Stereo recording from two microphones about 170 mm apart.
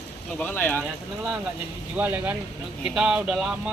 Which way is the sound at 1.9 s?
10° right (ahead or behind).